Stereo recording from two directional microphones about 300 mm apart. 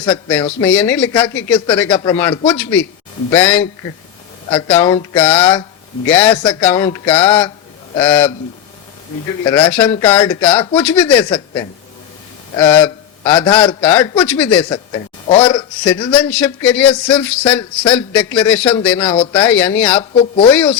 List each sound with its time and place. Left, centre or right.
0.0 s a man's voice: centre
4.7 s a man's voice: centre
9.4 s speech: centre
11.3 s a man's voice: centre
12.5 s a man's voice: centre
15.3 s a man's voice: centre
16.1 s speech: centre
20.0 s speech: centre
20.5 s speech: centre